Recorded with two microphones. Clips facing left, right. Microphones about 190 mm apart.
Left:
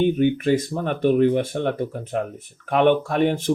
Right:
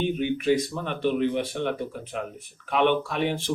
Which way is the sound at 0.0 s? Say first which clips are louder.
Left 6 dB; 50° left (ahead or behind).